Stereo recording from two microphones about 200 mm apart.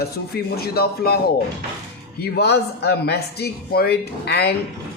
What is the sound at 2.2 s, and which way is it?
A man's voice, 55° left (ahead or behind).